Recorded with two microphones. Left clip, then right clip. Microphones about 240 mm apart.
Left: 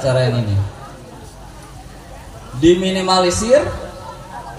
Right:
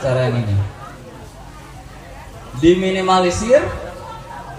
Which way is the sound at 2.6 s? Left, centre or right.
Left.